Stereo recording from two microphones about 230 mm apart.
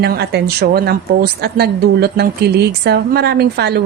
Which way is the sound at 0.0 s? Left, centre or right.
Right.